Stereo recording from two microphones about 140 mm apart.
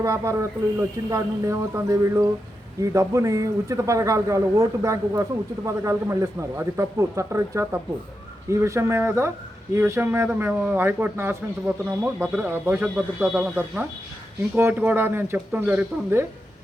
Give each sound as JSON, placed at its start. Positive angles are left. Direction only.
{"t": 0.0, "sound": "a man's voice", "side_deg": -20}